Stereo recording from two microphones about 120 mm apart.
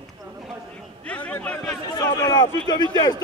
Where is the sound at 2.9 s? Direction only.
35° left (ahead or behind).